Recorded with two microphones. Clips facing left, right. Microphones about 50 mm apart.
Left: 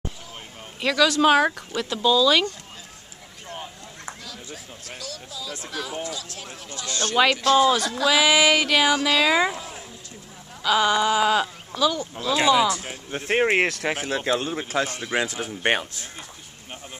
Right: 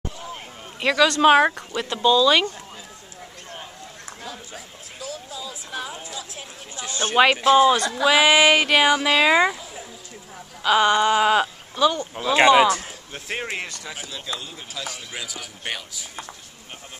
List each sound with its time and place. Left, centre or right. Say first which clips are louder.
0.7 s a man's voice: right 1 dB; centre
5.1 s a sound: right 2 dB; right
5.7 s speech: left 3 dB; right
10.6 s speech: right 2 dB; right
12.4 s speech: right 5 dB; right
13.1 s speech: left 9 dB; left
13.6 s speech: left 10 dB; left
13.9 s speech: left 8 dB; left